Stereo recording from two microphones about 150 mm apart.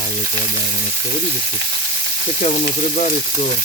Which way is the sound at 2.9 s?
45° left (ahead or behind).